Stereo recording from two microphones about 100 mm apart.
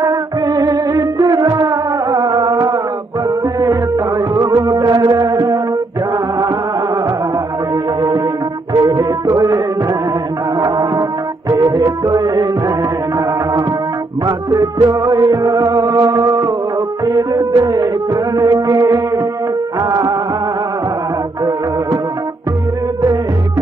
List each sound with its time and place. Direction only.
0.0 s music: 35° right (ahead or behind)
4.4 s music: 25° right (ahead or behind)
4.6 s music: 40° right (ahead or behind)
8.7 s music: 40° right (ahead or behind)
10.6 s music: 40° right (ahead or behind)
14.2 s music: 40° right (ahead or behind)
19.9 s music of bollywood: 40° right (ahead or behind)